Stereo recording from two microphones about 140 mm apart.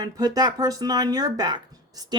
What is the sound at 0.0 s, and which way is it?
A woman's voice, 25° right (ahead or behind).